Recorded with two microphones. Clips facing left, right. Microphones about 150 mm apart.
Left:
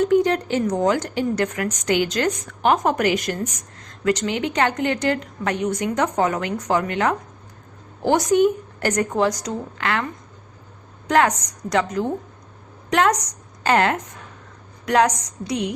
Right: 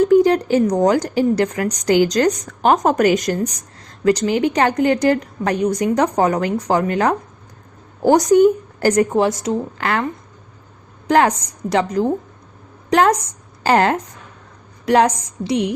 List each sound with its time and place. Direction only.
0.0 s speech: 35° right (ahead or behind)
11.1 s a woman's voice: 30° right (ahead or behind)